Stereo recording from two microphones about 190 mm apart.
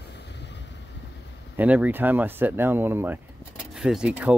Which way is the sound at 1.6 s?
10° right (ahead or behind).